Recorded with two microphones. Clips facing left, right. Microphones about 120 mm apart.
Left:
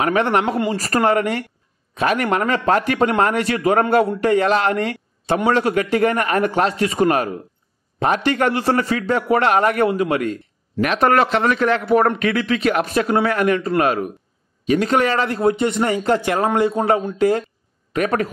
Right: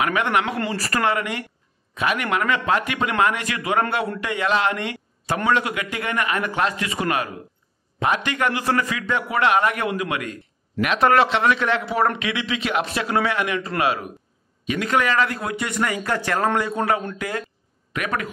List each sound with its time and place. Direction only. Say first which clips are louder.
0.0 s a man's voice: left 4 dB; 35° left (ahead or behind)